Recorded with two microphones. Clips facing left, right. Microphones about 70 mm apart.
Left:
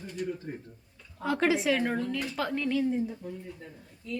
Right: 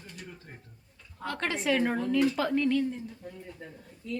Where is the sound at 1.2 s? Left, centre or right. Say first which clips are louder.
Left 6 dB; centre.